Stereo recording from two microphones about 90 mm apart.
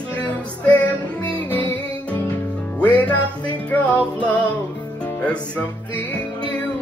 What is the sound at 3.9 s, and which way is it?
Music, 15° left (ahead or behind).